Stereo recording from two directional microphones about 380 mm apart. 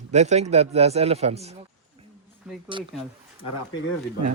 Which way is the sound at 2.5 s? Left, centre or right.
Centre.